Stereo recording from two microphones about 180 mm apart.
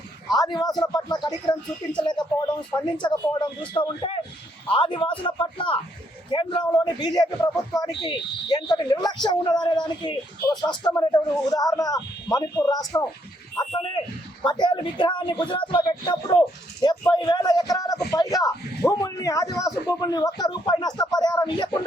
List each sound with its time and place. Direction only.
0.3 s speech: 20° left (ahead or behind)
14.4 s speech: 25° left (ahead or behind)